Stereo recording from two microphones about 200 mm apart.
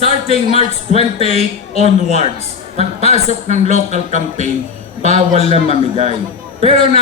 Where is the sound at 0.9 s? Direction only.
35° right (ahead or behind).